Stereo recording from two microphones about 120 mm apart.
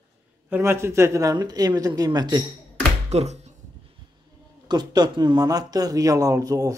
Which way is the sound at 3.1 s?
65° right (ahead or behind).